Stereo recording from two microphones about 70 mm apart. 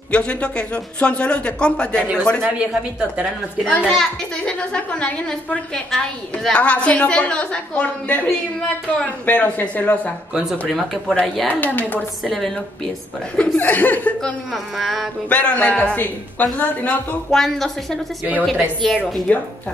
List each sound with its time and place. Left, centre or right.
0.1 s a woman's voice: centre
2.6 s a woman's voice: centre
3.6 s a woman's voice: centre
10.7 s speech: centre
11.4 s speech: left
12.3 s speech: centre
13.6 s speech: left
14.2 s speech: centre
15.2 s speech: centre
17.3 s speech: centre
19.3 s speech: left